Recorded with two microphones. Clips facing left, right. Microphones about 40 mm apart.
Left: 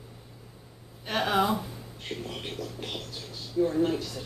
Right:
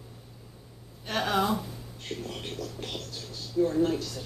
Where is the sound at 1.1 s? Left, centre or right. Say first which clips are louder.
Left 1 dB; centre.